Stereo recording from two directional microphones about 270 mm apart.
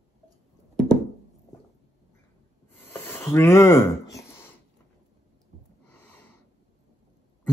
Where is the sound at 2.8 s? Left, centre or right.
Centre.